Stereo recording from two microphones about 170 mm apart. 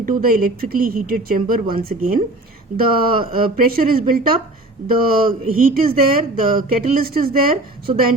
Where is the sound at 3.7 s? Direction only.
60° right (ahead or behind).